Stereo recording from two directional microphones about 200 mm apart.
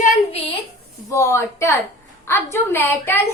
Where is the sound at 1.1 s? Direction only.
15° left (ahead or behind).